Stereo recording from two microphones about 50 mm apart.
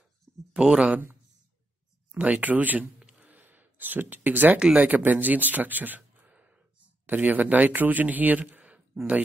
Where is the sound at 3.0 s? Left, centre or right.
Right.